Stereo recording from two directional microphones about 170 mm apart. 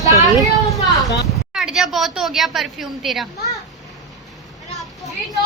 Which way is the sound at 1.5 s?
5° right (ahead or behind).